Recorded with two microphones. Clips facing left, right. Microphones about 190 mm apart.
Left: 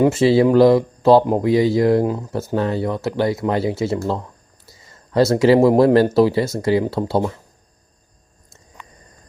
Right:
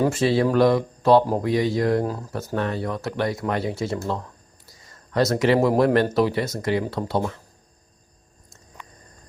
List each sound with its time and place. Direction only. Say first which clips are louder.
0.0 s speech: left 6 dB; 25° left (ahead or behind)